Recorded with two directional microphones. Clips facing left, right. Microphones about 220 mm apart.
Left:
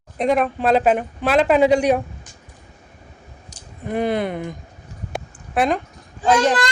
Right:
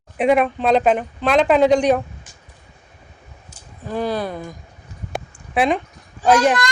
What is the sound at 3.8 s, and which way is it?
Speech, 20° left (ahead or behind).